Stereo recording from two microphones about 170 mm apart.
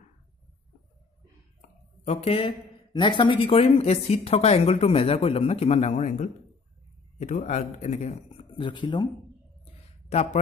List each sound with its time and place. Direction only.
2.0 s a man's voice: 35° left (ahead or behind)
8.5 s speech: 25° left (ahead or behind)
10.0 s speech: 40° left (ahead or behind)